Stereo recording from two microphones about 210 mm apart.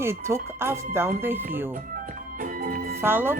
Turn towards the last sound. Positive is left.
turn(degrees=-10)  # may be behind; listen again after turning